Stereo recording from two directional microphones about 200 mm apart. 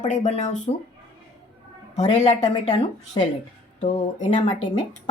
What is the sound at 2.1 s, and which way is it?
Speech, 35° left (ahead or behind).